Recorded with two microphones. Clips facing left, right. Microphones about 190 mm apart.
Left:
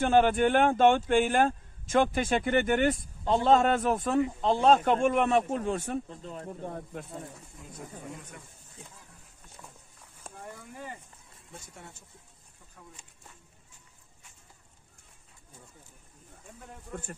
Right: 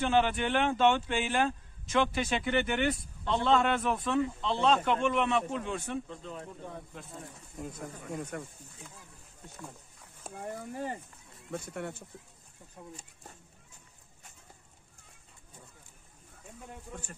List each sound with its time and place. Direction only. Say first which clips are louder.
0.0 s speech: left 5 dB; 50° left (ahead or behind)
8.2 s speech: right 10 dB; 55° right (ahead or behind)
10.3 s a sound: right 3 dB; 5° right (ahead or behind)
10.7 s speech: right 6 dB; 35° right (ahead or behind)
11.5 s speech: right 11 dB; 65° right (ahead or behind)
12.8 s speech: right 5 dB; 25° right (ahead or behind)